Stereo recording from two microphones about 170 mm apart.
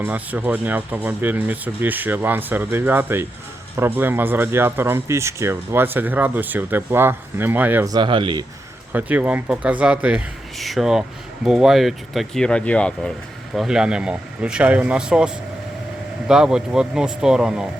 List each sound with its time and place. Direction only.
0.0 s speech: 10° right (ahead or behind)
7.9 s speech: 25° right (ahead or behind)
8.9 s speech: 10° right (ahead or behind); by 13.1 s 5° left (ahead or behind)
13.6 s speech: 5° right (ahead or behind)